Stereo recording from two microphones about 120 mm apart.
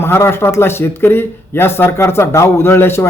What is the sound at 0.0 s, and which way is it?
Speech, 20° left (ahead or behind).